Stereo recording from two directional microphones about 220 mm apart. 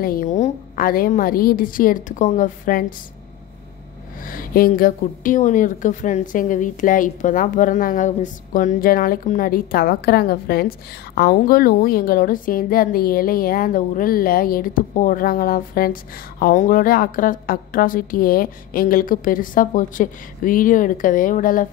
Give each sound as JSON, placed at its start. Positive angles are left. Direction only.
{"t": 0.0, "sound": "a woman's voice", "side_deg": 40}
{"t": 4.2, "sound": "a woman's voice", "side_deg": 40}